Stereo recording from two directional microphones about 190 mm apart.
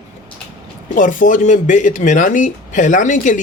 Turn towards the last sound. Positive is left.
turn(degrees=40)  # may be behind; listen again after turning